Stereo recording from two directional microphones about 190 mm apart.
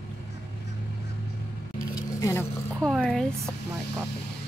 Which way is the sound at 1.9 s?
15° left (ahead or behind).